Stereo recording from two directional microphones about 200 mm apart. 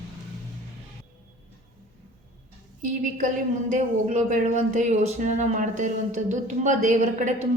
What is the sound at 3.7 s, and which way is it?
Speech, 35° right (ahead or behind).